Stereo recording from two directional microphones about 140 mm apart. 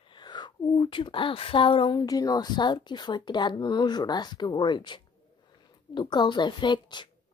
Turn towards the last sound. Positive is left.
turn(degrees=35)  # may be behind; listen again after turning